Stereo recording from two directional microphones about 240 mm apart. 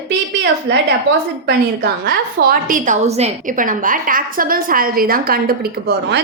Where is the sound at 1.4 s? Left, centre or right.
Right.